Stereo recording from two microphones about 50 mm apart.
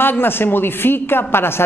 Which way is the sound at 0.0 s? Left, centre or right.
Left.